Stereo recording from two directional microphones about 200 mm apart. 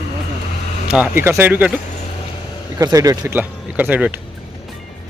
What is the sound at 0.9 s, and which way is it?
Speech, 5° right (ahead or behind).